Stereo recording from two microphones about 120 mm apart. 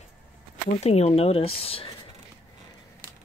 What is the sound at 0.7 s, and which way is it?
Speech, 65° left (ahead or behind).